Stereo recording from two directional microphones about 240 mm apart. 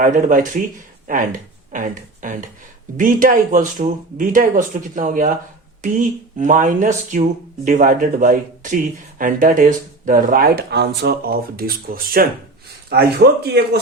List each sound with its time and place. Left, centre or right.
0.0 s speech: right
6.3 s speech: right